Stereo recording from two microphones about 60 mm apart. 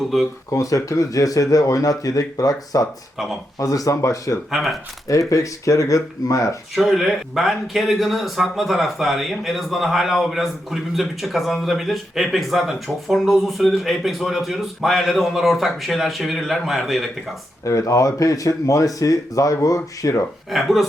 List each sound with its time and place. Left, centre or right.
0.1 s speech: centre
0.5 s speech: left
3.6 s speech: left
4.5 s speech: centre
5.3 s speech: left
6.7 s speech: centre
17.7 s speech: left
20.5 s speech: centre